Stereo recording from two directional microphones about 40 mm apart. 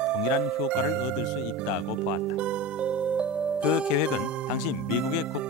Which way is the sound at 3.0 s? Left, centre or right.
Right.